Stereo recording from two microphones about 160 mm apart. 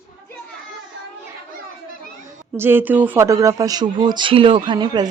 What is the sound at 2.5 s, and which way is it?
Speech, 15° right (ahead or behind).